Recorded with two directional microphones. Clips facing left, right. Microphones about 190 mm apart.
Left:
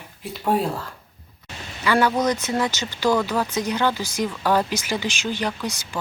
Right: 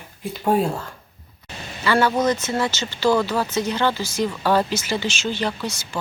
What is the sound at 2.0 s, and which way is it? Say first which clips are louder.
Speech: right 1 dB; 5° right (ahead or behind).